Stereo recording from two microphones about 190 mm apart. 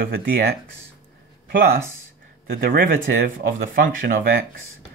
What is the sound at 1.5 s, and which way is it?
Speech, 50° right (ahead or behind).